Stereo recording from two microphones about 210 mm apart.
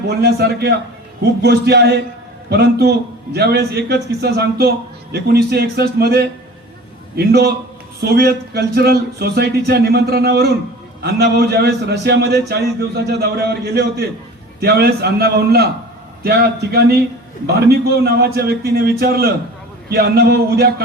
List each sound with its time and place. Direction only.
0.1 s speech: 50° right (ahead or behind)